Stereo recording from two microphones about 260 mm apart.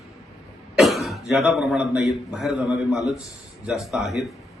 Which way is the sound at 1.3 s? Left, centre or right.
Centre.